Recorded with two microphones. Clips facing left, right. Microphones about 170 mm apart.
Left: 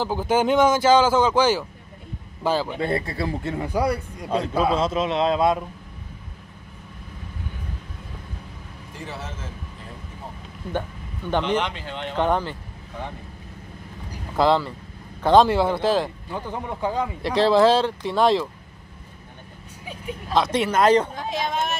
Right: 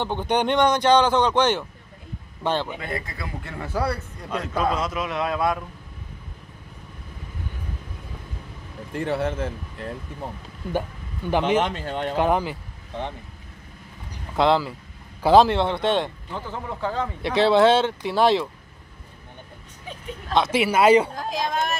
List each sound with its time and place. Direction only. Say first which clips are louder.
0.0 s speech: left 2 dB; 5° left (ahead or behind)
2.8 s a man's voice: left 7 dB; 30° left (ahead or behind); by 4.3 s 15° left (ahead or behind)
4.7 s a man's voice: left 4 dB; 25° left (ahead or behind)
8.9 s speech: right 11 dB; 60° right (ahead or behind)
11.2 s speech: right 2 dB; 10° right (ahead or behind)
11.6 s speech: right 4 dB; 45° right (ahead or behind)
12.2 s speech: even; 10° right (ahead or behind)
14.3 s speech: even; centre (ahead or behind)
16.3 s speech: left 2 dB; 15° left (ahead or behind)
17.2 s speech: even; centre (ahead or behind)
19.9 s speech: even; 10° left (ahead or behind)
20.4 s speech: right 2 dB; 5° right (ahead or behind)